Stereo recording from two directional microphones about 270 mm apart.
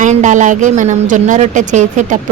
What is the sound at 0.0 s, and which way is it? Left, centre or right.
A woman's voice, right.